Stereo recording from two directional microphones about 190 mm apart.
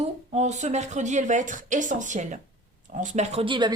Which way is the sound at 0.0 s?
35° right (ahead or behind).